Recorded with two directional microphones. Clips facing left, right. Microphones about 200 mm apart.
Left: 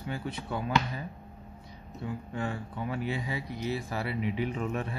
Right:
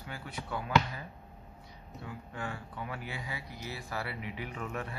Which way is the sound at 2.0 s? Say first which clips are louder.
Left 7 dB; 25° left (ahead or behind).